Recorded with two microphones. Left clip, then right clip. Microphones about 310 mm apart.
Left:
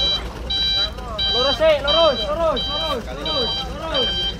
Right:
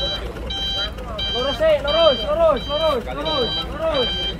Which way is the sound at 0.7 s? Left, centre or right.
Centre.